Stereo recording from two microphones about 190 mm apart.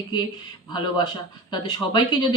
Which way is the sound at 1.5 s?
20° left (ahead or behind).